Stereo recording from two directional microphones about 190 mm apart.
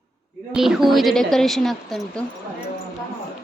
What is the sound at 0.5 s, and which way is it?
A woman's voice, centre (ahead or behind).